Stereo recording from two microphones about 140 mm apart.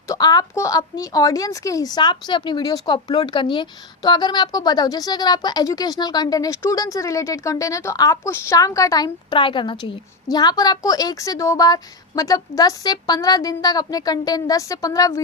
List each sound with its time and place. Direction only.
0.1 s a woman's voice: 25° left (ahead or behind)